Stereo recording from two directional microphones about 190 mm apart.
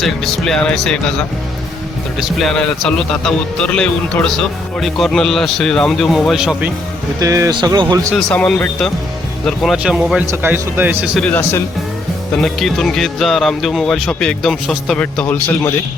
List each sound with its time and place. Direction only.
0.0 s a man's voice: centre (ahead or behind)
2.2 s a man's voice: centre (ahead or behind)
7.2 s speech: 15° right (ahead or behind)
8.1 s a man's voice: 5° left (ahead or behind)
11.0 s a man's voice: centre (ahead or behind)